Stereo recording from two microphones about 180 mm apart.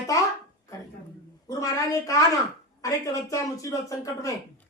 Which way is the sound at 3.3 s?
15° left (ahead or behind).